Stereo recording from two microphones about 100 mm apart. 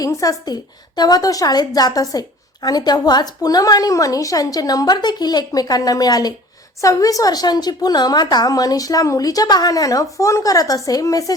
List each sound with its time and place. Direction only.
0.0 s a woman's voice: 35° left (ahead or behind)